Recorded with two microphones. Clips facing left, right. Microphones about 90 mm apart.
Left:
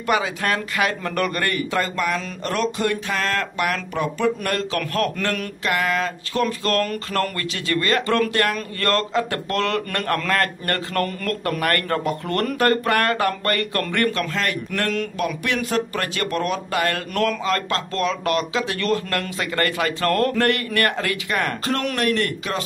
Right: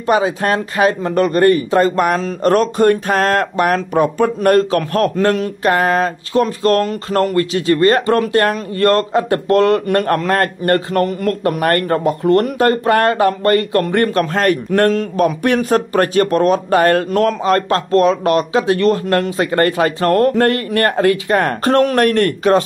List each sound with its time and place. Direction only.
0.0 s speech: 30° right (ahead or behind)
2.0 s speech: 45° right (ahead or behind); by 14.2 s 30° right (ahead or behind)
14.3 s speech: 40° right (ahead or behind)
21.5 s speech: 45° right (ahead or behind)